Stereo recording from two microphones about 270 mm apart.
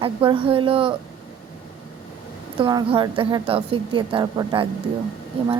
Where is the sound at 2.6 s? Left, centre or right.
Centre.